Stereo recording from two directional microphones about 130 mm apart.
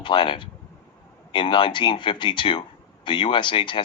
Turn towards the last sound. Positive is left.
turn(degrees=40)  # may be behind; listen again after turning